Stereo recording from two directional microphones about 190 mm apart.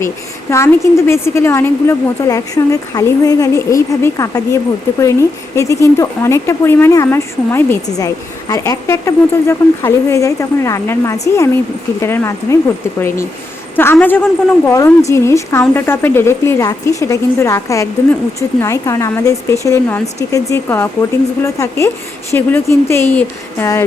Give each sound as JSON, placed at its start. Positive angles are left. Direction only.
{"t": 0.5, "sound": "speech", "side_deg": 15}